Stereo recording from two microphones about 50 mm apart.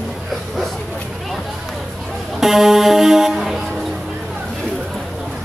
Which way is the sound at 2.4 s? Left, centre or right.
Centre.